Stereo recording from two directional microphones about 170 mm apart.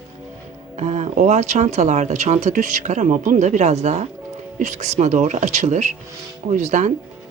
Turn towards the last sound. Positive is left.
turn(degrees=-45)  # may be behind; listen again after turning